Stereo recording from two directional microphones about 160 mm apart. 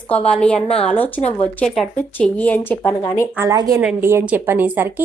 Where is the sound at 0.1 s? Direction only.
5° left (ahead or behind).